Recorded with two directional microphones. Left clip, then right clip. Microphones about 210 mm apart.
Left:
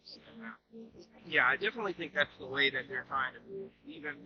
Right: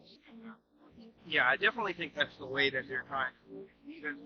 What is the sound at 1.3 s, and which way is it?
Speech, 15° right (ahead or behind).